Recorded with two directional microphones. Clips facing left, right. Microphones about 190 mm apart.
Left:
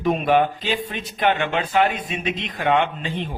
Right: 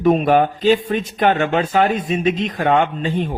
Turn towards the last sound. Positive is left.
turn(degrees=-45)  # may be behind; listen again after turning